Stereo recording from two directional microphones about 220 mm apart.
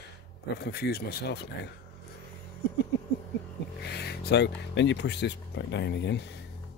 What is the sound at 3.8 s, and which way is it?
Speech, 50° left (ahead or behind).